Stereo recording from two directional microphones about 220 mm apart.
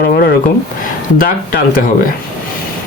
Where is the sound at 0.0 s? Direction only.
50° left (ahead or behind).